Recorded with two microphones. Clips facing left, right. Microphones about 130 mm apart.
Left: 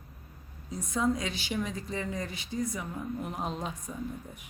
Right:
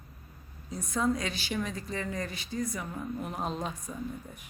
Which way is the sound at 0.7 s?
15° left (ahead or behind).